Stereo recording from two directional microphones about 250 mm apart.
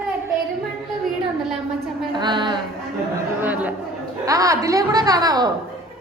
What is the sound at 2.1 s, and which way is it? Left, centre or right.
Speech, centre.